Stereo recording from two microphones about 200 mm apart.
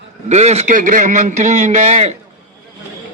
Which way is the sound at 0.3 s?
35° right (ahead or behind).